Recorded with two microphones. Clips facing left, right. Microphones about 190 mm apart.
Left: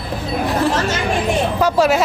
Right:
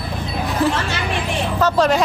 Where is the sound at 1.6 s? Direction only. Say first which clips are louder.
Even; 10° left (ahead or behind).